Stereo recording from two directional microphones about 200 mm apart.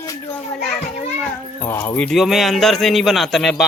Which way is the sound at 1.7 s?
10° left (ahead or behind).